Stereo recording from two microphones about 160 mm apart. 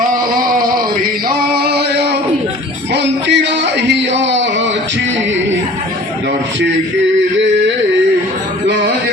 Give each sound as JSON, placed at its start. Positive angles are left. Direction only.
{"t": 1.5, "sound": "music", "side_deg": -80}